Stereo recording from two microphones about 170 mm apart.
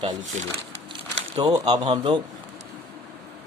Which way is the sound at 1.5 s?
25° right (ahead or behind).